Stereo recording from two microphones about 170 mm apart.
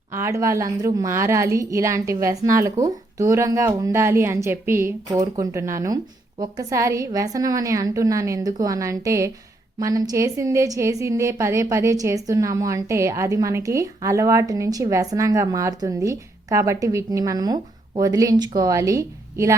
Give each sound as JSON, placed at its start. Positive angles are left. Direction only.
{"t": 0.1, "sound": "a woman's voice", "side_deg": -15}